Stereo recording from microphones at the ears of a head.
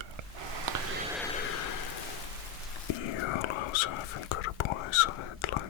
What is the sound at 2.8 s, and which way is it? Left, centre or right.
Whispering, left.